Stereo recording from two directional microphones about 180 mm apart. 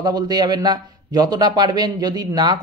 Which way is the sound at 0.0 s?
20° right (ahead or behind).